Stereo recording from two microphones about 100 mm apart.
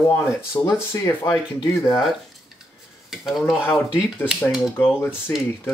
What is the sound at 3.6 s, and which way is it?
Speech, 25° left (ahead or behind).